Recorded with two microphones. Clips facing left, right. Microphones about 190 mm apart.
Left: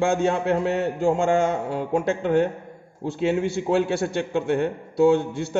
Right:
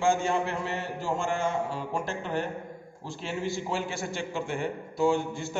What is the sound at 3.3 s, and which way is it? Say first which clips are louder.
A man's voice: left 7 dB; 65° left (ahead or behind).